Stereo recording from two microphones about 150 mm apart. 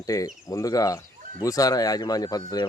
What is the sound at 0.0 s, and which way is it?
Speech, 20° left (ahead or behind).